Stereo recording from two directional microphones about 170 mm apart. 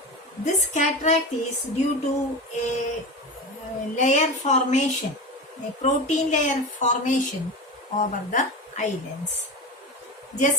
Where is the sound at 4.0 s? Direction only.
45° left (ahead or behind).